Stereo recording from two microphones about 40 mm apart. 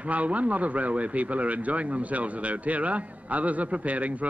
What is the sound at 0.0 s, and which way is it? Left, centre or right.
A man's voice, right.